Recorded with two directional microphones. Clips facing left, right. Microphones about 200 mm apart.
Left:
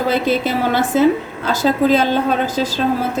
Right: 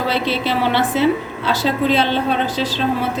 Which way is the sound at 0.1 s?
45° left (ahead or behind).